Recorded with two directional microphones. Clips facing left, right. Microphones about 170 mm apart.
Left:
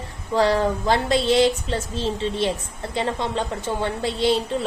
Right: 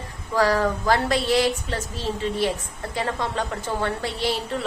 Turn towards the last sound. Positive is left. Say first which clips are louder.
# left 5 dB
turn(degrees=20)  # may be behind; listen again after turning